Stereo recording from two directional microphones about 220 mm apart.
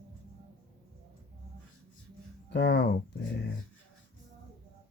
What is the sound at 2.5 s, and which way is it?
Speech, 50° left (ahead or behind).